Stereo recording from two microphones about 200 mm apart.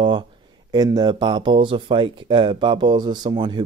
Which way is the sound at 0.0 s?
25° right (ahead or behind).